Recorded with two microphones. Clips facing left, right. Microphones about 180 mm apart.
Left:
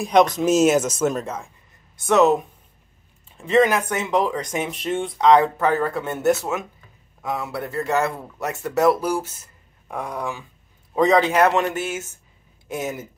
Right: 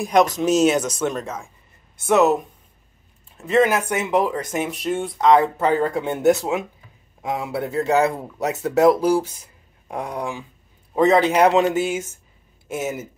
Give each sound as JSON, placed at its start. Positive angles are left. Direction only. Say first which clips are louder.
{"t": 0.0, "sound": "speech", "louder": "left 1 dB", "side_deg": -5}
{"t": 2.0, "sound": "speech", "louder": "even", "side_deg": -10}